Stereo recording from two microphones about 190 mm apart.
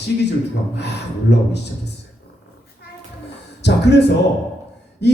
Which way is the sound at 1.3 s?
65° left (ahead or behind).